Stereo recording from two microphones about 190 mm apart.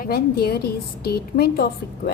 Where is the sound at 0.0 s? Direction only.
50° left (ahead or behind).